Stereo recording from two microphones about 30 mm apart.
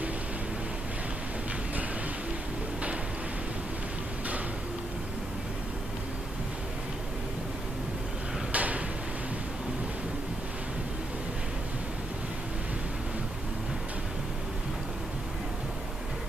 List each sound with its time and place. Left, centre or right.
8.5 s drawer open or close: right